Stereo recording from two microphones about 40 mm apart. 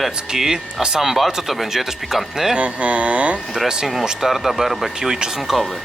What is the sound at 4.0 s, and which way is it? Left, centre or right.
Speech, centre.